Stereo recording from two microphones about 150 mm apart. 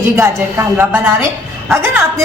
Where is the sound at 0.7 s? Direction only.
15° right (ahead or behind).